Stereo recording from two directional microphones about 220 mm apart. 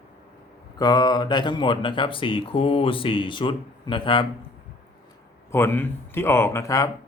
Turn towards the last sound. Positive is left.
turn(degrees=15)  # may be behind; listen again after turning